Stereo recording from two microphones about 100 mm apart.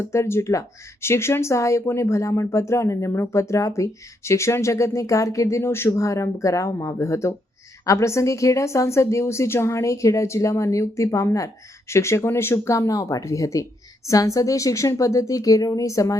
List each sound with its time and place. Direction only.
0.0 s a woman's voice: 25° left (ahead or behind)